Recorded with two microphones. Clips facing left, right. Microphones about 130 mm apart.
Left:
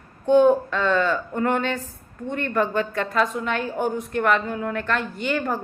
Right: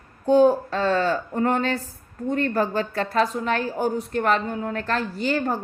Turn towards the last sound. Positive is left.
turn(degrees=-35)  # may be behind; listen again after turning